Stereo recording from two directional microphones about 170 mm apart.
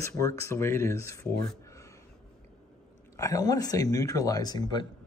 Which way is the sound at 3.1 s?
20° left (ahead or behind).